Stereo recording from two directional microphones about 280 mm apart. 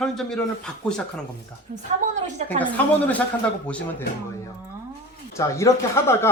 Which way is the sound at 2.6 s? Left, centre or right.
Centre.